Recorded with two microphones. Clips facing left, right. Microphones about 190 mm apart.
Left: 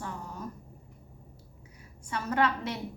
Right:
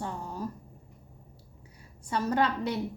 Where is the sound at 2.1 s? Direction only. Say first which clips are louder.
Right 1 dB; 35° right (ahead or behind).